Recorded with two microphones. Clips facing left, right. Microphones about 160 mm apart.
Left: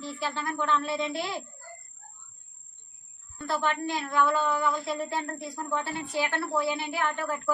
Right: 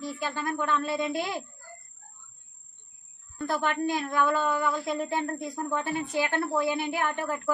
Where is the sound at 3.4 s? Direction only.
50° right (ahead or behind).